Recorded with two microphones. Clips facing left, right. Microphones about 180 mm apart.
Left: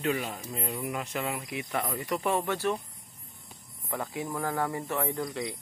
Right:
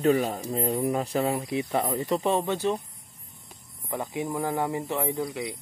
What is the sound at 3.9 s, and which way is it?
Speech, 20° right (ahead or behind).